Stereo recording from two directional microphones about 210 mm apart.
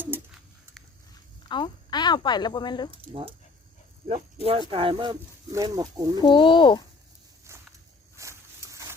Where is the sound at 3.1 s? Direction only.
25° right (ahead or behind).